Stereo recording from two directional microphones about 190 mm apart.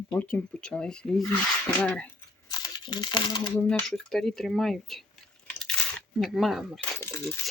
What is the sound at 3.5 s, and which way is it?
Speech, 10° left (ahead or behind).